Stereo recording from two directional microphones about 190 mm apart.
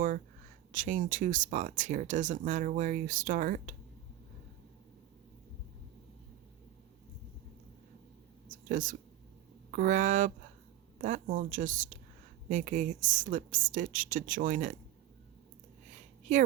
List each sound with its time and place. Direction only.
0.7 s speech: 45° right (ahead or behind)
8.4 s a sound: 45° right (ahead or behind)
9.7 s speech: 45° right (ahead or behind)